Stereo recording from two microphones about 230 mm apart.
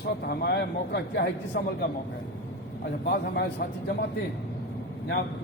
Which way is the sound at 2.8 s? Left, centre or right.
Left.